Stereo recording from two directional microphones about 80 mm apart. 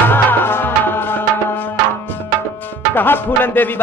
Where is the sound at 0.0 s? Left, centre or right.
Left.